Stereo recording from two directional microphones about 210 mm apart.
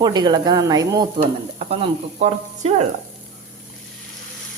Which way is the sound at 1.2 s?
30° right (ahead or behind).